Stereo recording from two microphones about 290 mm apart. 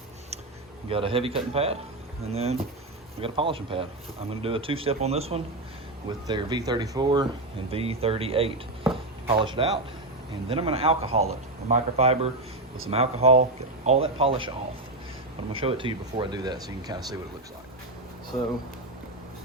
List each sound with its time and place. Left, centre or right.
0.9 s speech: centre
15.6 s speech: centre